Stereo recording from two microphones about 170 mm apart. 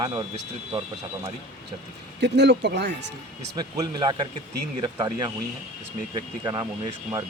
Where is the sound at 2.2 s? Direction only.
90° right.